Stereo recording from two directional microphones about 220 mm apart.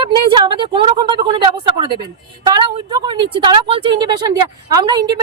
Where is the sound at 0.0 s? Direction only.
20° right (ahead or behind).